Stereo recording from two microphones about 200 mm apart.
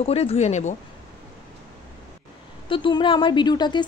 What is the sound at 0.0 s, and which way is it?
Speech, 30° left (ahead or behind).